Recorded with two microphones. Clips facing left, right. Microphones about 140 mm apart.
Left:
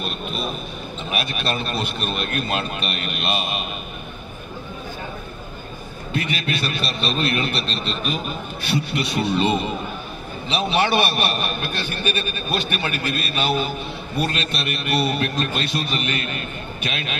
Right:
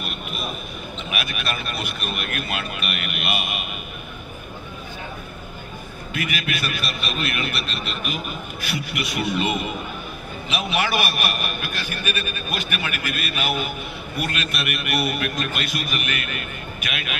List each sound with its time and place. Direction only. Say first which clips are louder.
0.0 s a sound: left 4 dB; 30° left (ahead or behind)
1.1 s a man's voice: left 4 dB; 30° left (ahead or behind)
6.1 s a man's voice: left 3 dB; 30° left (ahead or behind)